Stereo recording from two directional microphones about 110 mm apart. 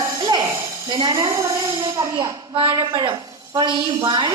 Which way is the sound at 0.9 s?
50° right (ahead or behind).